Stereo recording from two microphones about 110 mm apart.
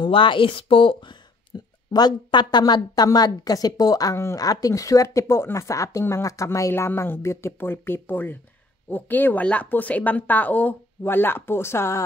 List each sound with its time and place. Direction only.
0.0 s speech: 50° left (ahead or behind)
1.5 s a sound: 40° left (ahead or behind)
1.9 s a woman's voice: 35° left (ahead or behind)